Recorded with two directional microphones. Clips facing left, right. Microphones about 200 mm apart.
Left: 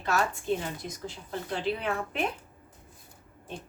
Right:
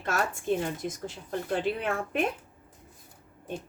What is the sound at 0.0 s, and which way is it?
A woman's voice, 50° right (ahead or behind).